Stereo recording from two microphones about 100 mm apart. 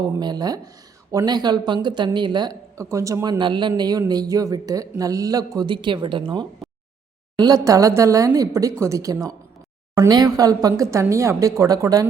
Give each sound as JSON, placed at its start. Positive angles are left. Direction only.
{"t": 0.2, "sound": "speech", "side_deg": -45}
{"t": 2.7, "sound": "speech", "side_deg": -30}
{"t": 3.3, "sound": "speech", "side_deg": -50}
{"t": 7.3, "sound": "speech", "side_deg": -40}